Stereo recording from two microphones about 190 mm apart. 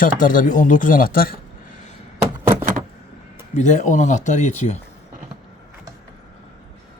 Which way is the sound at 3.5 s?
40° left (ahead or behind).